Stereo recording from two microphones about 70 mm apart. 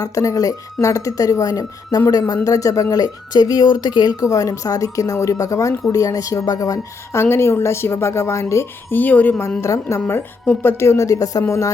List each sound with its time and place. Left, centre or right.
0.0 s speech: left
7.1 s a woman's voice: left
8.9 s speech: left
9.6 s speech: left
11.4 s speech: left